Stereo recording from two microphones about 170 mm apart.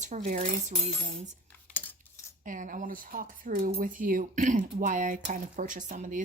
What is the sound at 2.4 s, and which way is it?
A woman's voice, 50° right (ahead or behind).